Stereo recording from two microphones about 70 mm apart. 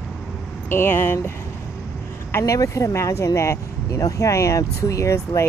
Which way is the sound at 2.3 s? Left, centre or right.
Left.